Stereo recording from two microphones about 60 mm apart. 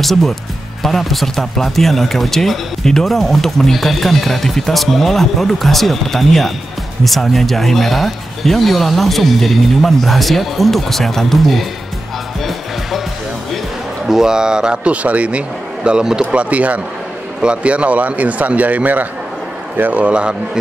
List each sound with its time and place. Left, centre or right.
0.0 s speech: centre
14.0 s speech: centre